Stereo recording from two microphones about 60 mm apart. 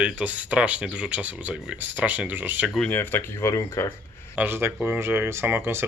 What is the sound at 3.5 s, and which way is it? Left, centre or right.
Speech, left.